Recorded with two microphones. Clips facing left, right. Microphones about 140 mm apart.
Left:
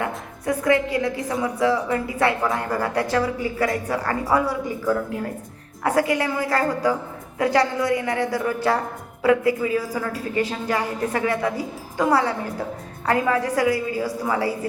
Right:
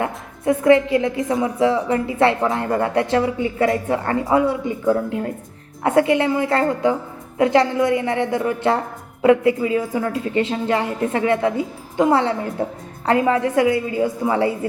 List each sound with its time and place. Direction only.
0.0 s a woman's voice: 25° right (ahead or behind)